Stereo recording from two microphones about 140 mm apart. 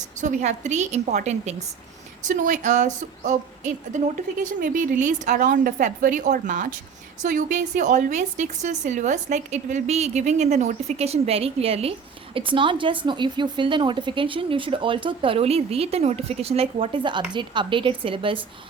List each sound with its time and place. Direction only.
0.2 s a woman's voice: 60° right (ahead or behind); by 18.3 s 40° right (ahead or behind)